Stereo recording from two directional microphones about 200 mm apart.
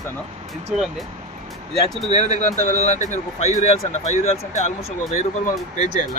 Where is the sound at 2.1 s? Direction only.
35° left (ahead or behind).